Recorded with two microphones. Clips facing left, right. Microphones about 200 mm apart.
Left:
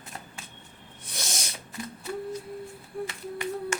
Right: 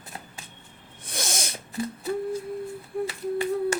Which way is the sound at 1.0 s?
50° right (ahead or behind).